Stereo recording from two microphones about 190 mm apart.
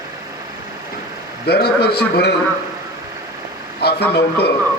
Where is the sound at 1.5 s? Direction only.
55° left (ahead or behind).